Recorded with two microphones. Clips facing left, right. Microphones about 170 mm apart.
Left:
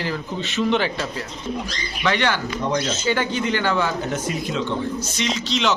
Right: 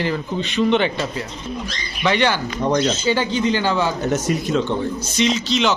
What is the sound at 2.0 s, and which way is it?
Speech, 20° right (ahead or behind).